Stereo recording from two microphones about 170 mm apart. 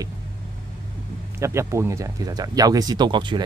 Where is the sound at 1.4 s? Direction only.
15° right (ahead or behind).